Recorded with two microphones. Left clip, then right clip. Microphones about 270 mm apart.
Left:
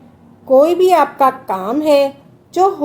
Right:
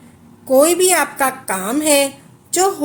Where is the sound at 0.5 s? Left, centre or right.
Right.